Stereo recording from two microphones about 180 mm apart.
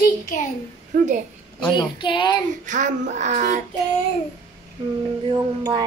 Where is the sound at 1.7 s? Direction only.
25° left (ahead or behind).